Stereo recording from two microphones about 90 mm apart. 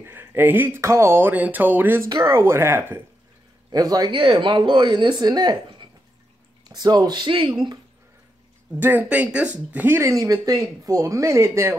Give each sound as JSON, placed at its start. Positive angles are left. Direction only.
{"t": 0.0, "sound": "speech", "side_deg": -25}
{"t": 2.0, "sound": "speech", "side_deg": -40}
{"t": 3.7, "sound": "speech", "side_deg": -45}
{"t": 4.1, "sound": "speech", "side_deg": -65}
{"t": 8.7, "sound": "speech", "side_deg": -20}